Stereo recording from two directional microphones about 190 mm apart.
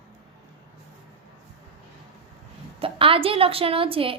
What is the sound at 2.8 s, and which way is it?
A woman's voice, 30° right (ahead or behind).